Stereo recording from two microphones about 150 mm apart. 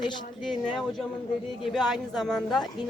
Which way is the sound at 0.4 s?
Centre (ahead or behind).